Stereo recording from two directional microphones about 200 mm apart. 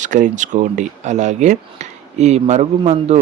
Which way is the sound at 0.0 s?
40° right (ahead or behind).